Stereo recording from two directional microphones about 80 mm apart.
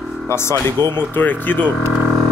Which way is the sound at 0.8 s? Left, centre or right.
Right.